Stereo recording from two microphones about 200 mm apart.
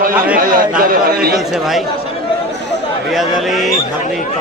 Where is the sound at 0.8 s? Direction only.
45° right (ahead or behind).